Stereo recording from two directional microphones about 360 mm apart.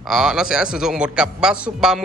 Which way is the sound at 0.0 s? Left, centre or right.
Centre.